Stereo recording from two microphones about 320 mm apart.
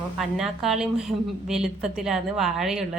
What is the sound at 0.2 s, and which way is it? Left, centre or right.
A woman's voice, centre.